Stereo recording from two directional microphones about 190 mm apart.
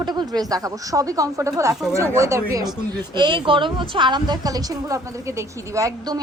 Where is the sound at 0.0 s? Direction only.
20° right (ahead or behind).